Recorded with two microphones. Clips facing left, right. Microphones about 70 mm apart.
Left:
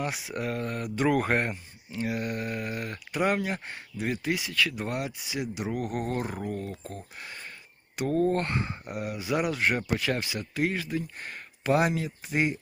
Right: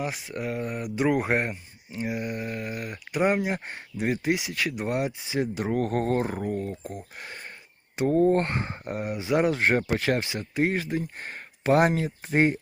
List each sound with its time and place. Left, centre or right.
0.0 s speech: centre
3.2 s speech: right
5.5 s speech: right
6.2 s speech: right
10.2 s speech: right